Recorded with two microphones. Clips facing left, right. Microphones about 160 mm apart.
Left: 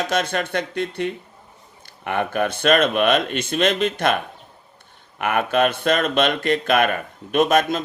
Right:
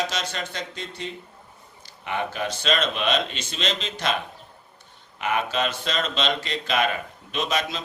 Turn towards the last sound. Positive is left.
turn(degrees=50)  # may be behind; listen again after turning